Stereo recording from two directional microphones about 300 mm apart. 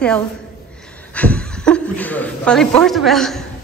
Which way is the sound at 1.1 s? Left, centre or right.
Centre.